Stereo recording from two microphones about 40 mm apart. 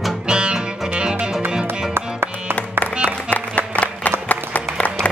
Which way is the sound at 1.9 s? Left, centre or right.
Right.